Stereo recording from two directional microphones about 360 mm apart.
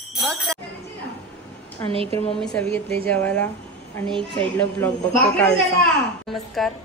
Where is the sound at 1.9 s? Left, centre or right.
Centre.